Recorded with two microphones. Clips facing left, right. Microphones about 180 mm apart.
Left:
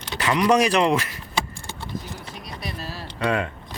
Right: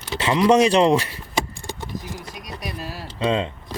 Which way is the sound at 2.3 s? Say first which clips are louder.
Right 1 dB; 10° right (ahead or behind).